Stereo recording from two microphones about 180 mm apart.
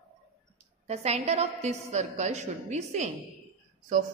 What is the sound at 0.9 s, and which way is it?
A woman's voice, 35° right (ahead or behind).